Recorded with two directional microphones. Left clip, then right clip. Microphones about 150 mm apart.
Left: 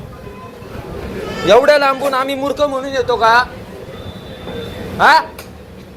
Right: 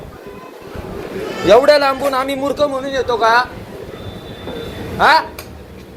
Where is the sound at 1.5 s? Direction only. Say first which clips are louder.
Even; 15° right (ahead or behind).